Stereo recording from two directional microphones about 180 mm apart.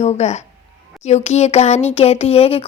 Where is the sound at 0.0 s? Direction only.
40° left (ahead or behind).